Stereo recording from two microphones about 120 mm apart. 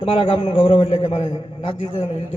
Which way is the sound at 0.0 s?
50° left (ahead or behind).